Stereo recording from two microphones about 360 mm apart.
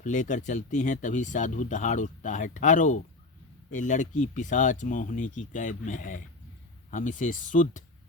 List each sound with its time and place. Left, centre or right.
0.0 s speech: left